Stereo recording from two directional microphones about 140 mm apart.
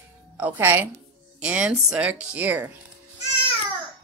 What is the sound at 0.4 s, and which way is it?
Speech, 15° right (ahead or behind).